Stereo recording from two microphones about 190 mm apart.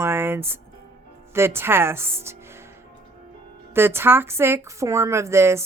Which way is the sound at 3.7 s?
10° right (ahead or behind).